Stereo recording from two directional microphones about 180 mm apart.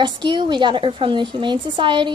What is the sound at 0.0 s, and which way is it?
A woman's voice, 25° right (ahead or behind).